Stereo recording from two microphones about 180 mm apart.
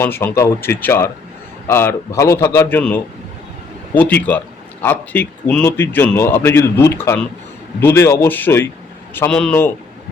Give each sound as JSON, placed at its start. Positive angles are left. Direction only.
{"t": 0.0, "sound": "speech", "side_deg": 10}